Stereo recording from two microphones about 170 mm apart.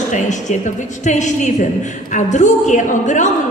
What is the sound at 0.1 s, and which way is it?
A woman's voice, 45° left (ahead or behind).